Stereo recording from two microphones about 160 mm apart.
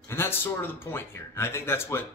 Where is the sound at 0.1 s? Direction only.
15° left (ahead or behind).